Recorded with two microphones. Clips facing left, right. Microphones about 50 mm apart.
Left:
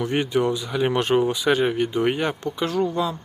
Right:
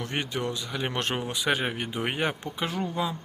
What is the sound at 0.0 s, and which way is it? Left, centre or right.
Speech, centre.